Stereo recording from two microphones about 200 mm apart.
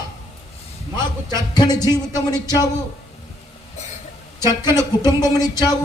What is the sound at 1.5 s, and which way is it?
Speech, 20° left (ahead or behind).